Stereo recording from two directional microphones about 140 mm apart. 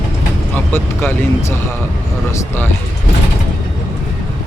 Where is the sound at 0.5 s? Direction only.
15° left (ahead or behind).